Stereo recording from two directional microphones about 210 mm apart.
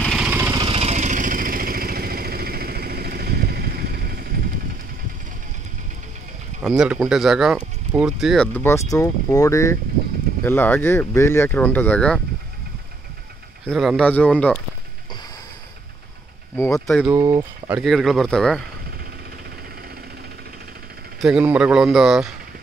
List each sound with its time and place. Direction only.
0.0 s lawn mower: centre (ahead or behind)
0.7 s vehicle: 30° right (ahead or behind); by 4.3 s 45° right (ahead or behind)
6.6 s speech: 5° right (ahead or behind)
8.5 s speech: 10° left (ahead or behind)
13.7 s speech: centre (ahead or behind)
16.5 s speech: 10° left (ahead or behind)
17.1 s speech: 15° right (ahead or behind); by 18.6 s 5° left (ahead or behind)
21.2 s speech: 5° right (ahead or behind)